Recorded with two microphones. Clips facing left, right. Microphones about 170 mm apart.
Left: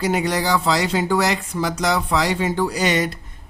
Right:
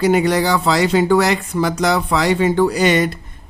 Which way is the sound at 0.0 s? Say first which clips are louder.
Right 6 dB; 60° right (ahead or behind).